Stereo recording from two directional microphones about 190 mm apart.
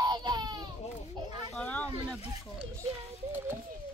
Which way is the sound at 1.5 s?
5° left (ahead or behind).